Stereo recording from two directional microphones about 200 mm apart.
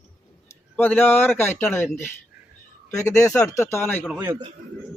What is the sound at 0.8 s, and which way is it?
Speech, 10° left (ahead or behind).